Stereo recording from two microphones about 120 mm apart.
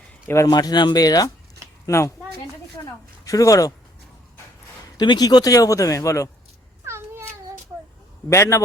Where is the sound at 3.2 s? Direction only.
30° left (ahead or behind).